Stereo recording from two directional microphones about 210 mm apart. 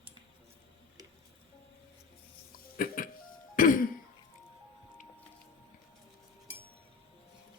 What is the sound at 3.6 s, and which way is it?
Cough, 40° left (ahead or behind).